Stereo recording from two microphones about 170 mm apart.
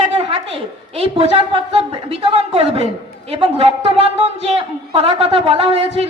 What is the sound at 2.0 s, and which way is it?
A woman's voice, 35° right (ahead or behind).